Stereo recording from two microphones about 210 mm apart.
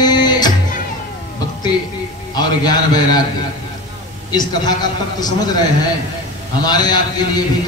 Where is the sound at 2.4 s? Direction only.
20° left (ahead or behind).